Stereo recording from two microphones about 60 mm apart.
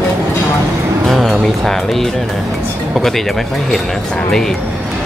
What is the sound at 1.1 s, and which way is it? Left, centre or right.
Speech, centre.